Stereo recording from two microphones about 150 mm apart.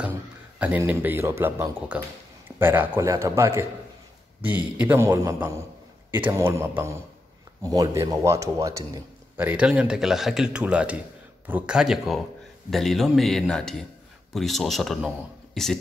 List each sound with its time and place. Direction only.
0.6 s speech: 10° right (ahead or behind)
4.7 s a man's voice: 15° right (ahead or behind)
9.5 s speech: 10° right (ahead or behind)